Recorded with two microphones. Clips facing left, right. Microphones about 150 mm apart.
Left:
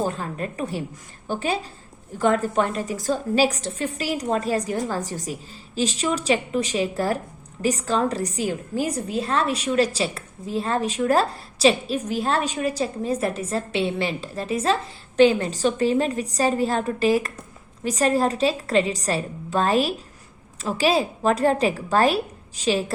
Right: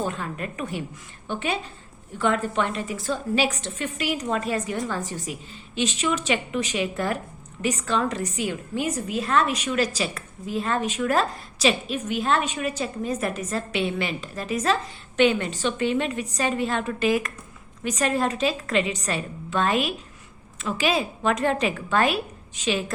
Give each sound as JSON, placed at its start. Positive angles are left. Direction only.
{"t": 0.0, "sound": "a woman's voice", "side_deg": 35}